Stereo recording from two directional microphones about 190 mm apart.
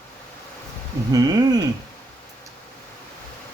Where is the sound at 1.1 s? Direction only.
20° right (ahead or behind).